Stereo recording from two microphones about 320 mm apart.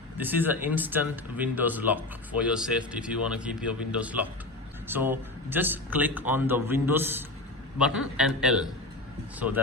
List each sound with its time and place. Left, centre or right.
0.2 s speech: centre